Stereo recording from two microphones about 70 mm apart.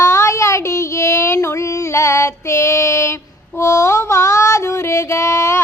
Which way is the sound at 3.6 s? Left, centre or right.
Left.